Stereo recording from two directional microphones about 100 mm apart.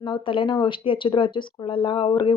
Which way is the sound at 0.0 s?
55° left (ahead or behind).